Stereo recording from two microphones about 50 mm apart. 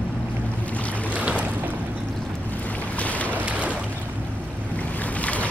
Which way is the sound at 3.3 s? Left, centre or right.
Right.